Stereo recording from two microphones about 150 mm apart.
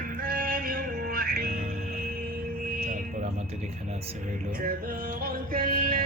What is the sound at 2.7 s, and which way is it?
Vehicle, 70° right (ahead or behind).